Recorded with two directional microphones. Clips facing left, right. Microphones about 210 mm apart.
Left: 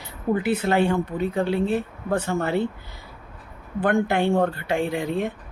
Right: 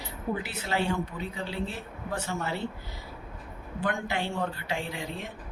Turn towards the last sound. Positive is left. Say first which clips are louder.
# left 11 dB
turn(degrees=55)  # may be behind; listen again after turning